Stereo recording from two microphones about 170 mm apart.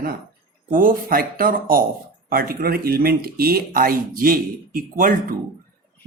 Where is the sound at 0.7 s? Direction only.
55° right (ahead or behind).